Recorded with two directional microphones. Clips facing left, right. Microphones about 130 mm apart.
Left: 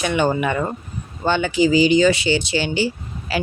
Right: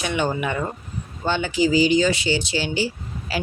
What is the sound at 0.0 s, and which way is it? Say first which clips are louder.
Speech: left 4 dB; 55° left (ahead or behind).